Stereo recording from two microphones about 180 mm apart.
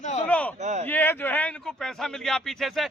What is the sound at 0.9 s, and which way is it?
Speech, 10° left (ahead or behind).